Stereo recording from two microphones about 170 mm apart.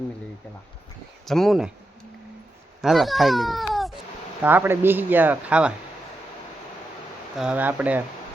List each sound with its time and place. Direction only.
1.2 s speech: centre (ahead or behind)
2.8 s a child's voice: centre (ahead or behind)
4.4 s speech: 10° right (ahead or behind)
7.3 s speech: 5° right (ahead or behind)